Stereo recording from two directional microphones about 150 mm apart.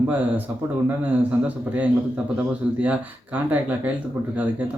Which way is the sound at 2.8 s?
10° right (ahead or behind).